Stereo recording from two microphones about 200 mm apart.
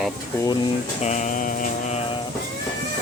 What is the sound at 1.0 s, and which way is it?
Mantra, 35° left (ahead or behind).